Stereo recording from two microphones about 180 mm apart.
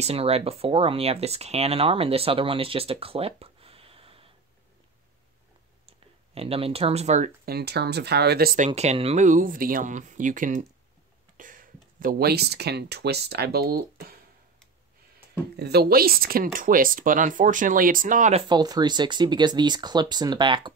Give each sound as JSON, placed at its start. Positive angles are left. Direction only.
{"t": 0.0, "sound": "speech", "side_deg": -35}
{"t": 5.9, "sound": "speech", "side_deg": -30}
{"t": 7.4, "sound": "speech", "side_deg": -60}
{"t": 8.5, "sound": "speech", "side_deg": -40}
{"t": 15.5, "sound": "speech", "side_deg": -65}
{"t": 18.5, "sound": "speech", "side_deg": -25}